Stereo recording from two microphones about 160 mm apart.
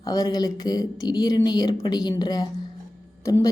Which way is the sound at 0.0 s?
25° left (ahead or behind).